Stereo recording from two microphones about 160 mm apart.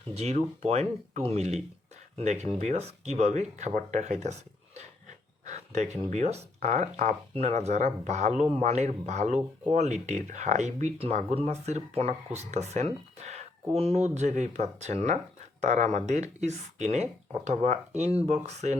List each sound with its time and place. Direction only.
0.1 s speech: 45° right (ahead or behind)